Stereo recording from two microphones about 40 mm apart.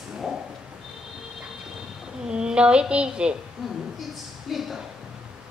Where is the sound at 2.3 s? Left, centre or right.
Right.